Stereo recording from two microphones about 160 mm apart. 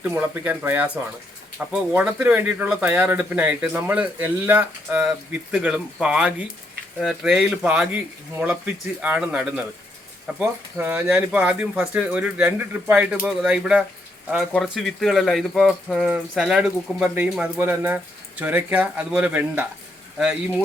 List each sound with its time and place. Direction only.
0.0 s speech: 10° right (ahead or behind)